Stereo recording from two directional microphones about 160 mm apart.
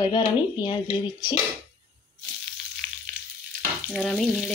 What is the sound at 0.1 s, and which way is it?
Speech, 30° left (ahead or behind).